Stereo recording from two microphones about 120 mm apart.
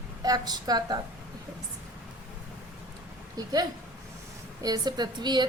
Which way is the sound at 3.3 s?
30° right (ahead or behind).